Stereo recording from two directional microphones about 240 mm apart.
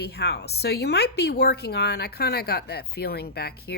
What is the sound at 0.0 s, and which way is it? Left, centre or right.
Speech, left.